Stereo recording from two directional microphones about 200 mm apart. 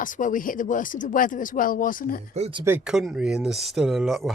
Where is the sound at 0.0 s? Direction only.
40° left (ahead or behind).